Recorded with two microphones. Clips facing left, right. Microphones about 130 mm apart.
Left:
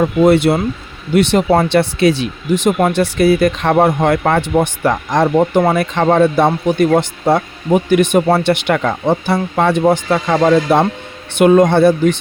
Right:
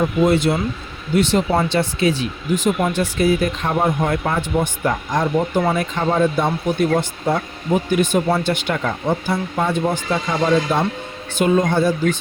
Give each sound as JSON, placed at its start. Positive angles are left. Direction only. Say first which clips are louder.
{"t": 0.0, "sound": "speech", "louder": "left 5 dB", "side_deg": 65}